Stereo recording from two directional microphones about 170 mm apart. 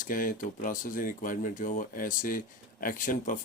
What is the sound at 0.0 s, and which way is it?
Speech, 50° left (ahead or behind).